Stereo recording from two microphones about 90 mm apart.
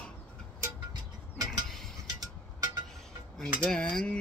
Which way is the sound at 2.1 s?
45° right (ahead or behind).